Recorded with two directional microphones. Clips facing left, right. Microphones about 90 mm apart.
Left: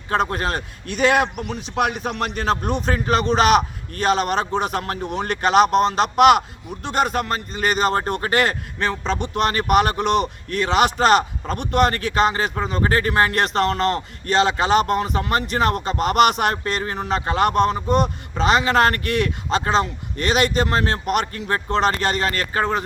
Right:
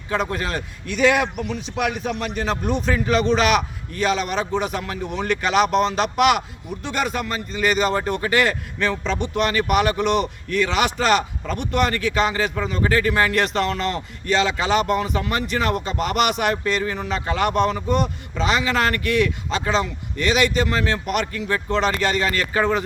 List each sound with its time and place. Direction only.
0.1 s a man's voice: 45° left (ahead or behind)
2.8 s a man's voice: 45° left (ahead or behind)